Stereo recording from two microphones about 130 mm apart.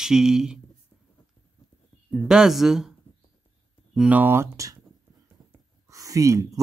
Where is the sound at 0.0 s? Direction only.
5° right (ahead or behind).